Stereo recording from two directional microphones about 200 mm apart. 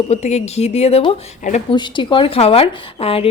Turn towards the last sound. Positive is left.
turn(degrees=30)  # may be behind; listen again after turning